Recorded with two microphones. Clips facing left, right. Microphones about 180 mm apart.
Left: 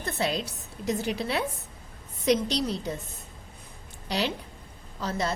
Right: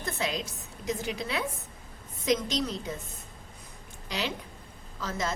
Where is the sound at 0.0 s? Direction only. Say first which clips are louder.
Left 3 dB; 35° left (ahead or behind).